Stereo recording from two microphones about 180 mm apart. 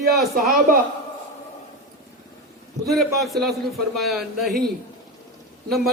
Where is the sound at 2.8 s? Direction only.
Centre (ahead or behind).